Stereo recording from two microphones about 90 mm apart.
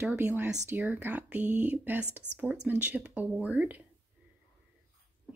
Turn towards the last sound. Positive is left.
turn(degrees=-15)  # may be behind; listen again after turning